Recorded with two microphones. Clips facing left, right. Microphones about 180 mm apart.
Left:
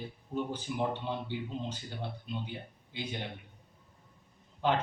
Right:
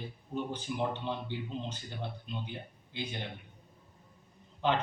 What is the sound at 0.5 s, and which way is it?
Speech, 10° left (ahead or behind).